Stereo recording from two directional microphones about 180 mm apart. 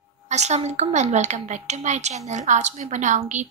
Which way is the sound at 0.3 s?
40° right (ahead or behind).